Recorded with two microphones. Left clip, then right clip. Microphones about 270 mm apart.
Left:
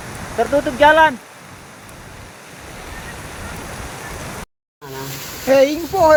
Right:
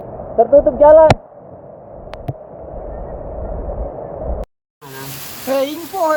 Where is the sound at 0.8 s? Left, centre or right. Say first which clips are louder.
Right 3 dB; left.